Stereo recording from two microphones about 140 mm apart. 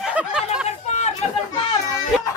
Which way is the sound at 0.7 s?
55° left (ahead or behind).